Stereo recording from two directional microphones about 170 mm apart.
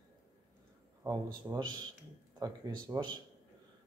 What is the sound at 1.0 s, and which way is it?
A man's voice, 20° right (ahead or behind).